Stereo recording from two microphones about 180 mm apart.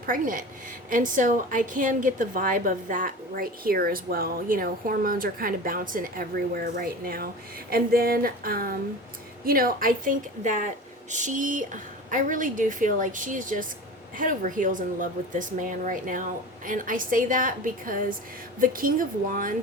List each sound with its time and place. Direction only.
0.0 s a woman's voice: 50° right (ahead or behind)
7.7 s a sound: 55° right (ahead or behind)
9.5 s a woman's voice: 55° right (ahead or behind)